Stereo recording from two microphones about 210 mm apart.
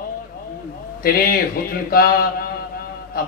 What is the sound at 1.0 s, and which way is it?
Speech, 45° left (ahead or behind).